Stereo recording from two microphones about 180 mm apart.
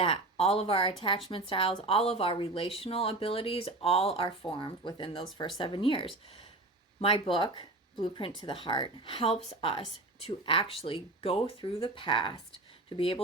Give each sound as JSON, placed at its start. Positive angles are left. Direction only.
{"t": 0.0, "sound": "a woman's voice", "side_deg": 30}